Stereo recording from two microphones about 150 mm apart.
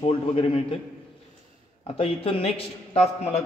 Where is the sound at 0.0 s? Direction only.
40° left (ahead or behind).